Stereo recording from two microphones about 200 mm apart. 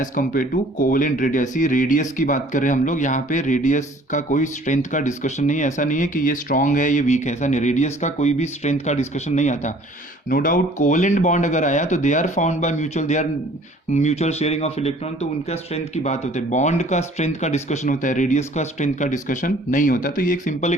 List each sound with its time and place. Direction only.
0.0 s speech: 40° left (ahead or behind)